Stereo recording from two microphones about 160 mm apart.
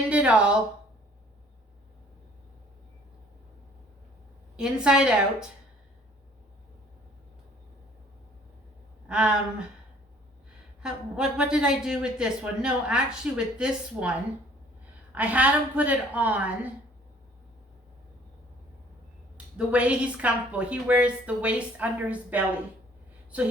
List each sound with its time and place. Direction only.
0.1 s a sound: 5° right (ahead or behind)
4.5 s a man's voice: 5° right (ahead or behind)
9.0 s speech: 5° right (ahead or behind)
10.8 s a man's voice: 5° right (ahead or behind)
19.5 s a woman's voice: 5° right (ahead or behind)